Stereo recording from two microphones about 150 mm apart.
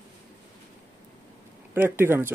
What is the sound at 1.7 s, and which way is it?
Speech, 15° right (ahead or behind).